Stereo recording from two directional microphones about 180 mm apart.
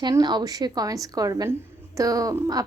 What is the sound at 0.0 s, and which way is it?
A woman's voice, 25° right (ahead or behind).